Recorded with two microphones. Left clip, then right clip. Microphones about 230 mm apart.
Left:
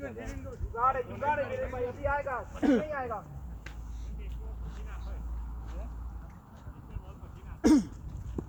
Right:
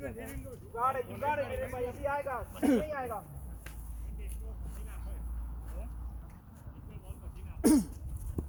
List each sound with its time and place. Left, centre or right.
0.0 s speech: centre
2.6 s speech: right
2.9 s speech: centre
7.6 s throat clearing: right
8.4 s clip-clop: centre